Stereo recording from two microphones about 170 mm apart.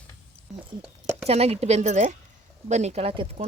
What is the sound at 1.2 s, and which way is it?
Speech, 35° right (ahead or behind).